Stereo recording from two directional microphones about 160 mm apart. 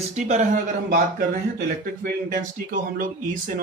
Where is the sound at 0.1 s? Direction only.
45° right (ahead or behind).